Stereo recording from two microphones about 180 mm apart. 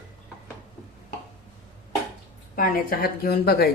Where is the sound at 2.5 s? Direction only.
50° left (ahead or behind).